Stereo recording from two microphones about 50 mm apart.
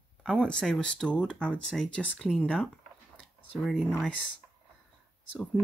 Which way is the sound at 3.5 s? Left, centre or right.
Centre.